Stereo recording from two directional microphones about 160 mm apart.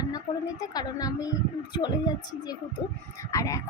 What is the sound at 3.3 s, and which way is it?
Speech, 20° left (ahead or behind).